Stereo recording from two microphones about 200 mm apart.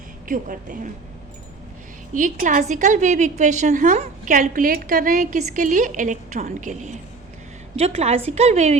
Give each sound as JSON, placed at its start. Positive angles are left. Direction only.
{"t": 0.3, "sound": "a woman's voice", "side_deg": -40}
{"t": 2.1, "sound": "a woman's voice", "side_deg": -40}